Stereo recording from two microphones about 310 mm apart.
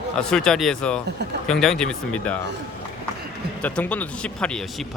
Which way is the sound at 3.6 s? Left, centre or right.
Centre.